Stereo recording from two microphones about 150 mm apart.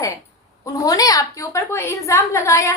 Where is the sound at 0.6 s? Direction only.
25° left (ahead or behind).